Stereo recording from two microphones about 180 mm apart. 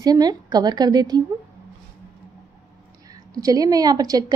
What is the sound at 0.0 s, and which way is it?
A woman's voice, 20° right (ahead or behind).